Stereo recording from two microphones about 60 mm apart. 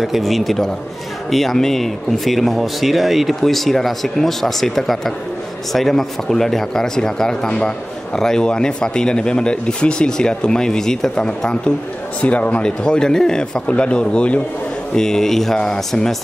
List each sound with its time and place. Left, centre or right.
0.0 s speech: centre